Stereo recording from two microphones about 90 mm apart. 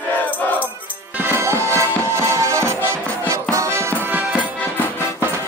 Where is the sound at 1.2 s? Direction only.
25° right (ahead or behind).